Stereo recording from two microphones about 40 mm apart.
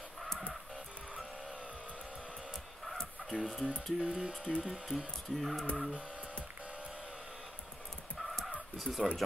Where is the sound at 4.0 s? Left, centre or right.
Right.